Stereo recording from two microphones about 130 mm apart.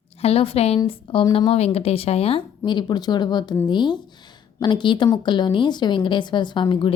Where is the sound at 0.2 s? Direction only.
50° left (ahead or behind).